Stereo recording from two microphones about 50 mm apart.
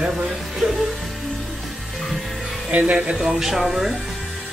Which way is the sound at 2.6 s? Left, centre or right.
Right.